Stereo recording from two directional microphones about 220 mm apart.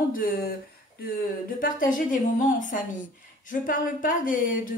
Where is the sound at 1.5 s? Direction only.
40° left (ahead or behind).